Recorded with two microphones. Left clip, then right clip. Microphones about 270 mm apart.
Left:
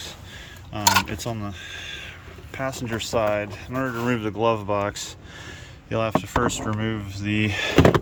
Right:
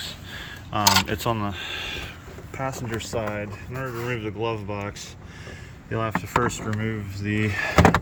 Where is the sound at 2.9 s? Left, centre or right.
Centre.